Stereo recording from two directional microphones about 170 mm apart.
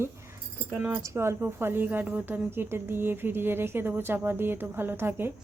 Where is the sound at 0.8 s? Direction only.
5° right (ahead or behind).